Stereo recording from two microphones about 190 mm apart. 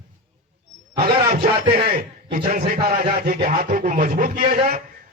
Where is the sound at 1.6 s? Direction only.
30° right (ahead or behind).